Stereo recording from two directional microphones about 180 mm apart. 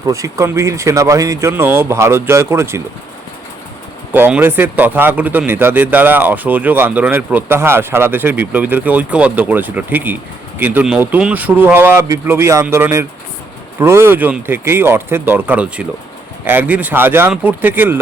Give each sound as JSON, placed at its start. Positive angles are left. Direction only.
{"t": 0.0, "sound": "speech", "side_deg": -15}
{"t": 4.1, "sound": "speech", "side_deg": -10}